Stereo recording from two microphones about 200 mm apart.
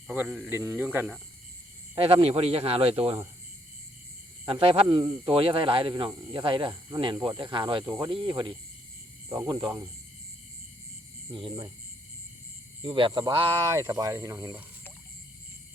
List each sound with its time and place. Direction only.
0.1 s speech: 5° right (ahead or behind)
2.0 s speech: 30° right (ahead or behind)
4.4 s speech: 30° right (ahead or behind)
11.3 s speech: 25° right (ahead or behind)
12.8 s speech: 25° right (ahead or behind)